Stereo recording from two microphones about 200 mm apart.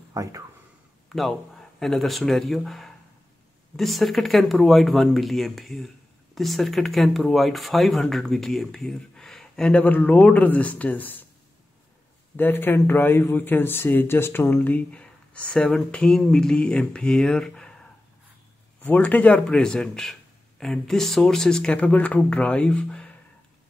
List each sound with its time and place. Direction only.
0.1 s speech: 15° right (ahead or behind)
1.0 s a sound: centre (ahead or behind)
1.8 s speech: centre (ahead or behind)
12.4 s a man's voice: 10° left (ahead or behind)
18.8 s speech: 10° left (ahead or behind)